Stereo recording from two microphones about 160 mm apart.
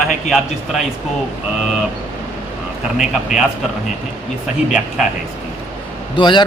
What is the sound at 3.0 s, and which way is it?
Speech, 5° right (ahead or behind).